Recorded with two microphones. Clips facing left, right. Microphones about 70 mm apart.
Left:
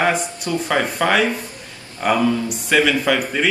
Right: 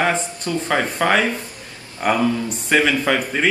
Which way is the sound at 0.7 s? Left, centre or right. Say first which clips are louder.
Even; centre.